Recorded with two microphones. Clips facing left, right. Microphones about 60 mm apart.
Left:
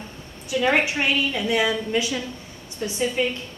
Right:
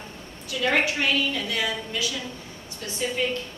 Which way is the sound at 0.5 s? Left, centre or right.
Centre.